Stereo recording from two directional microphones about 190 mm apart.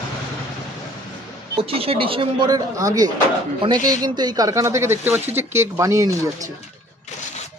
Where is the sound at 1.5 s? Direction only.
30° right (ahead or behind).